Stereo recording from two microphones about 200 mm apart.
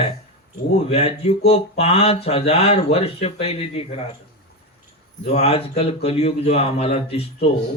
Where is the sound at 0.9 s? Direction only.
30° left (ahead or behind).